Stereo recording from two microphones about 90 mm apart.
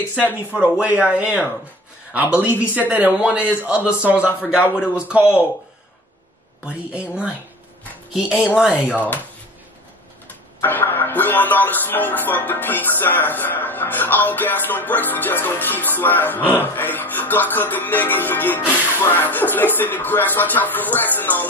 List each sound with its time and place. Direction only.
0.5 s a man's voice: 15° right (ahead or behind)
6.6 s a man's voice: 15° right (ahead or behind)
8.9 s music: 20° left (ahead or behind)
10.6 s music: 25° left (ahead or behind)